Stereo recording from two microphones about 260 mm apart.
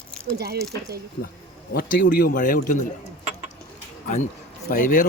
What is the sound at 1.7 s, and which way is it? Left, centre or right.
Speech, left.